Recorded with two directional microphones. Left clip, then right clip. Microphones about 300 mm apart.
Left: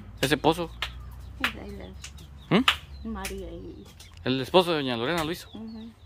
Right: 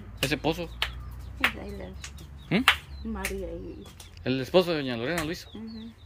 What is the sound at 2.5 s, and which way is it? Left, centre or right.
Speech, centre.